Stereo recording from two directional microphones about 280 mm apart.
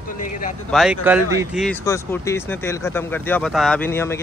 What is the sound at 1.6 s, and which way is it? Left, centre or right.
Speech, centre.